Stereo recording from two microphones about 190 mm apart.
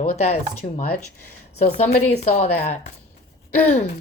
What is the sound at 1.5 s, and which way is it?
Speech, 35° left (ahead or behind).